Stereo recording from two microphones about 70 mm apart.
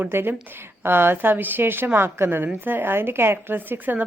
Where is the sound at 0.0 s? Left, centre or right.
Right.